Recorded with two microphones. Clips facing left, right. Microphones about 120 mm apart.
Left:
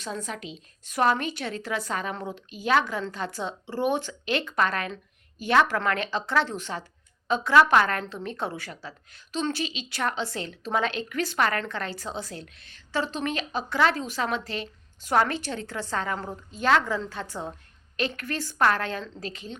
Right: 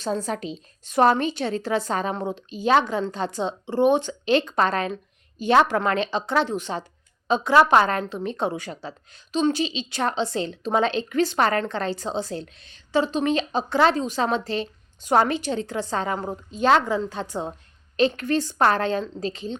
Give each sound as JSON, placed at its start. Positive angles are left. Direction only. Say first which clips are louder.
{"t": 0.0, "sound": "a woman's voice", "louder": "right 8 dB", "side_deg": -35}